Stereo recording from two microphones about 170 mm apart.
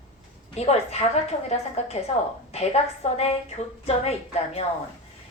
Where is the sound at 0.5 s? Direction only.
40° left (ahead or behind).